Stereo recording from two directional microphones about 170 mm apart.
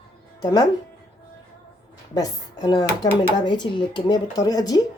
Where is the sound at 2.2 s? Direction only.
25° left (ahead or behind).